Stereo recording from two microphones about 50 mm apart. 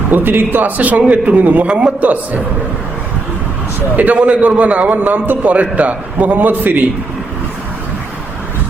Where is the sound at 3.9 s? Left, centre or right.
Right.